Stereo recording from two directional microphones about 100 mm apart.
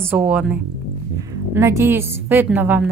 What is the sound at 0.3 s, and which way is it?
Speech, 10° right (ahead or behind).